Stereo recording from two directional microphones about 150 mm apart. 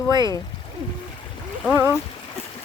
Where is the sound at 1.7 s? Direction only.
15° right (ahead or behind).